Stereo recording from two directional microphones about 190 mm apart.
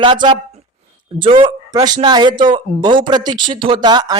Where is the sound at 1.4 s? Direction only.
20° right (ahead or behind).